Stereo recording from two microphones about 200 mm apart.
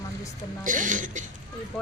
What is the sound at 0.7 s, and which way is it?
Speech, 40° right (ahead or behind).